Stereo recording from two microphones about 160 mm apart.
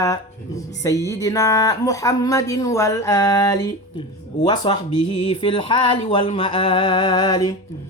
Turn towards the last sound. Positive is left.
turn(degrees=25)  # may be behind; listen again after turning